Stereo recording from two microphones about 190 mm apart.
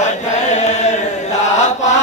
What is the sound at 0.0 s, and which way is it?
Chant, 40° left (ahead or behind).